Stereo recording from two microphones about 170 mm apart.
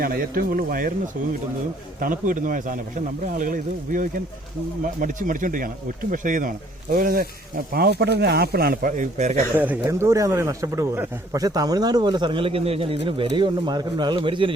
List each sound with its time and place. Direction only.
0.0 s speech: 60° right (ahead or behind)
6.9 s speech: 65° right (ahead or behind); by 9.4 s 45° right (ahead or behind)
9.6 s speech: 15° right (ahead or behind); by 14.5 s 30° right (ahead or behind)